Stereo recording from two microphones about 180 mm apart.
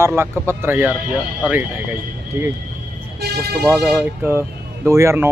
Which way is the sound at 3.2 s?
60° right (ahead or behind).